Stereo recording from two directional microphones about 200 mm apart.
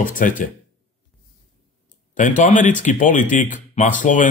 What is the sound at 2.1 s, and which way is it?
Speech, 40° left (ahead or behind).